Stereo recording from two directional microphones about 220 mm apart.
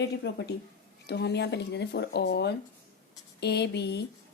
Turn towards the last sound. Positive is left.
turn(degrees=50)  # may be behind; listen again after turning